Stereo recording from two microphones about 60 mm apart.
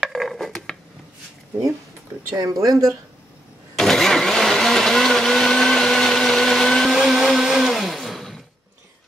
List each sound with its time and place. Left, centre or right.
0.0 s dishes: centre
2.4 s speech: right
3.7 s vehicle: centre